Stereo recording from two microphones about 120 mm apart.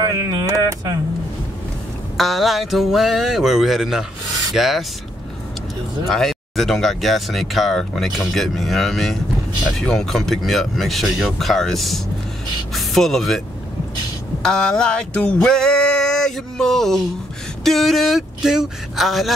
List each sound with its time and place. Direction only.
0.0 s speech: 30° right (ahead or behind)
2.1 s male singing: centre (ahead or behind)
6.0 s male singing: 5° left (ahead or behind)
14.4 s male singing: 5° left (ahead or behind)